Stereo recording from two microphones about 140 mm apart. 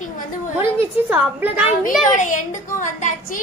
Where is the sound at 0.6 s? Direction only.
15° right (ahead or behind).